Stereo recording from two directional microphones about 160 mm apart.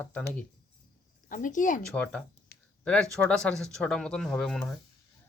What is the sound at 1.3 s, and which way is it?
Speech, 55° left (ahead or behind).